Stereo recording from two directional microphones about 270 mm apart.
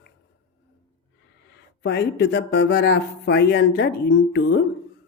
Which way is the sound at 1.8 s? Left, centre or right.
Left.